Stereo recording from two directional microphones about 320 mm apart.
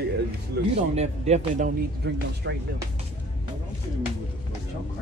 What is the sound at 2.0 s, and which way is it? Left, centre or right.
Speech, right.